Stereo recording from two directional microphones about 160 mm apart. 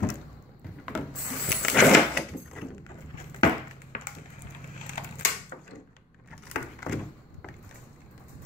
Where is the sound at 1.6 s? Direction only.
5° left (ahead or behind).